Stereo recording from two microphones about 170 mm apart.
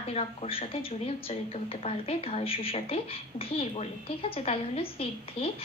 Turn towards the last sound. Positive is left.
turn(degrees=35)  # may be behind; listen again after turning